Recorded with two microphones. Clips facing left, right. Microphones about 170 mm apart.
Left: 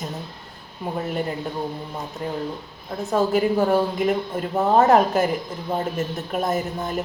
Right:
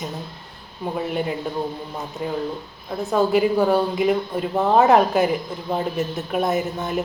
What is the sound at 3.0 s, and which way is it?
A woman's voice, centre (ahead or behind).